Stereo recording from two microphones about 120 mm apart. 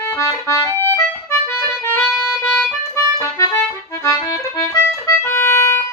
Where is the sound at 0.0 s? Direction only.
25° left (ahead or behind).